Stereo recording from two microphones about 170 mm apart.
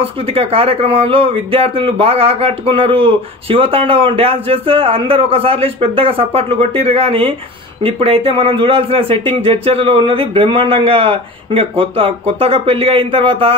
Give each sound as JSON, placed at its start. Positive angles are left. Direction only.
{"t": 0.3, "sound": "speech", "side_deg": -35}